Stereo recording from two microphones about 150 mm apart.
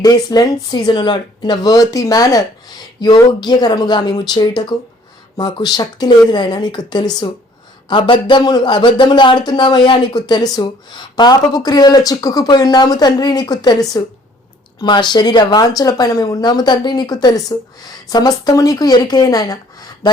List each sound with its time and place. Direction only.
0.0 s speech: 25° left (ahead or behind)